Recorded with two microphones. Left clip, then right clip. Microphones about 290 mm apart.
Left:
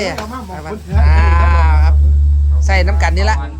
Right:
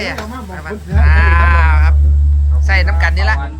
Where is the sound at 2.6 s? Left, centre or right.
Left.